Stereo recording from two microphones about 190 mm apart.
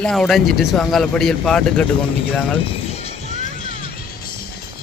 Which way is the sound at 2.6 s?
35° left (ahead or behind).